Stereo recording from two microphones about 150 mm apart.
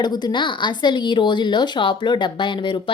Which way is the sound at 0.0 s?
30° left (ahead or behind).